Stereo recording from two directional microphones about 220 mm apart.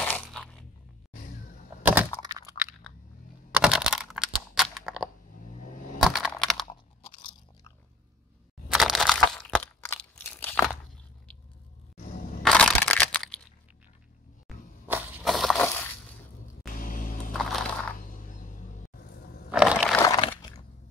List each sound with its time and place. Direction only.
0.0 s crunch: 5° left (ahead or behind)
1.8 s a sound: 5° right (ahead or behind)
5.5 s a sound: 35° left (ahead or behind)
6.0 s computer keyboard: centre (ahead or behind)
8.6 s crunch: centre (ahead or behind)
12.4 s crushing: 5° left (ahead or behind)
14.9 s crushing: 5° right (ahead or behind)
16.6 s music: 40° left (ahead or behind)
17.3 s crushing: centre (ahead or behind)
17.9 s a sound: 40° left (ahead or behind)
19.5 s crushing: 5° right (ahead or behind)
20.0 s a sound: 20° left (ahead or behind)